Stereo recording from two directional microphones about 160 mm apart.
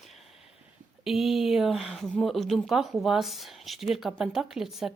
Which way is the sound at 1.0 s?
Centre (ahead or behind).